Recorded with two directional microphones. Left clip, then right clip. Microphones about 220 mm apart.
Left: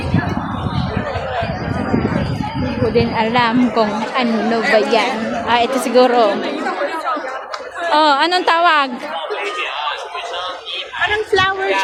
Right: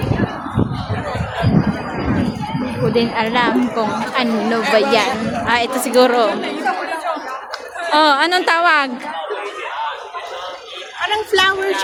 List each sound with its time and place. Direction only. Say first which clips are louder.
2.9 s a woman's voice: left 1 dB; 5° left (ahead or behind)
7.9 s a woman's voice: even; 5° left (ahead or behind)
11.3 s speech: right 2 dB; 50° right (ahead or behind)